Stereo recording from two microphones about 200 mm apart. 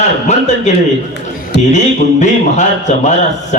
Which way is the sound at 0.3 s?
35° left (ahead or behind).